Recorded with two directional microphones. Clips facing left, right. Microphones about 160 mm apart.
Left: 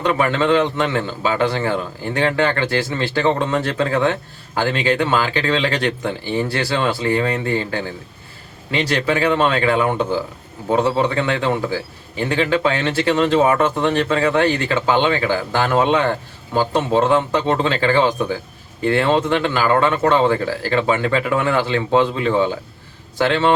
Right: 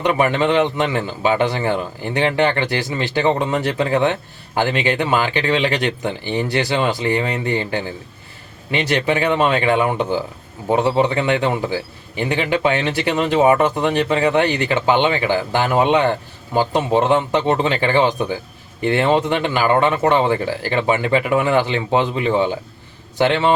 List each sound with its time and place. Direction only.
0.0 s speech: 20° right (ahead or behind)